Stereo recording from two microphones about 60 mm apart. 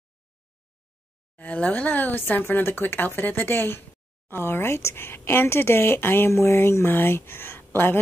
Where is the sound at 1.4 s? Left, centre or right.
Left.